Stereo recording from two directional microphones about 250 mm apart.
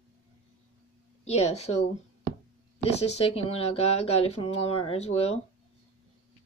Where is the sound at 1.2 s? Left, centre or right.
Left.